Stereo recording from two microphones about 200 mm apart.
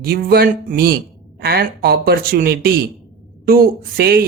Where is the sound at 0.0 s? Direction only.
50° right (ahead or behind).